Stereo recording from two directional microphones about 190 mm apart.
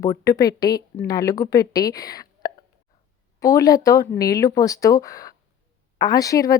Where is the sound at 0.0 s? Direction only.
15° left (ahead or behind).